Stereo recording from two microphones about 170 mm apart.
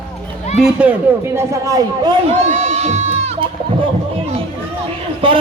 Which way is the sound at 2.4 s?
40° right (ahead or behind).